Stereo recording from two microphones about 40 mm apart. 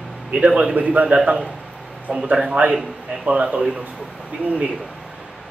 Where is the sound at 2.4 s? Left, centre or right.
Right.